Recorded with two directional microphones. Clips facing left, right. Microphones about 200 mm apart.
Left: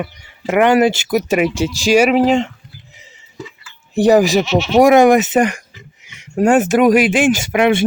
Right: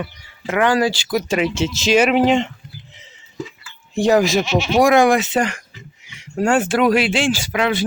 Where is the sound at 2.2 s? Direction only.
Centre (ahead or behind).